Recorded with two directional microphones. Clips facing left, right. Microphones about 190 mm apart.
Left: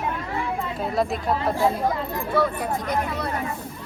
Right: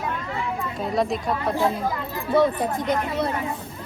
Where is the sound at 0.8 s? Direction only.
Centre (ahead or behind).